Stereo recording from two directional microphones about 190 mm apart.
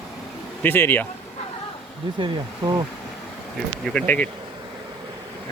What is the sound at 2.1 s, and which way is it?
Speech, 20° right (ahead or behind).